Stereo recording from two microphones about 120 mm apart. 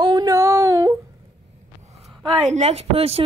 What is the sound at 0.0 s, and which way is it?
Female singing, 35° right (ahead or behind).